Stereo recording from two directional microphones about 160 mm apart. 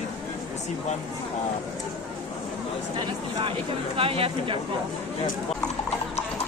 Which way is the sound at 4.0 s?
35° right (ahead or behind).